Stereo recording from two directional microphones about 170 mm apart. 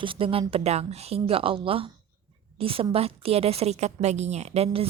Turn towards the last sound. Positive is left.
turn(degrees=-35)  # may be behind; listen again after turning